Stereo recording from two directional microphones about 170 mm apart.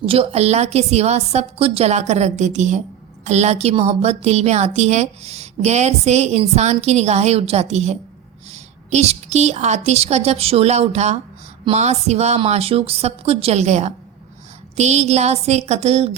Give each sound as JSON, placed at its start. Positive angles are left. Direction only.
{"t": 0.0, "sound": "a woman's voice", "side_deg": -35}